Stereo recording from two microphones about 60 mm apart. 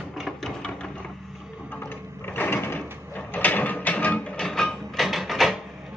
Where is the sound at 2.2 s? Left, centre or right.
Left.